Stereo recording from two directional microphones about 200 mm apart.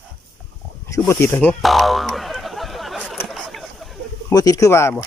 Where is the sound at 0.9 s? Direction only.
15° left (ahead or behind).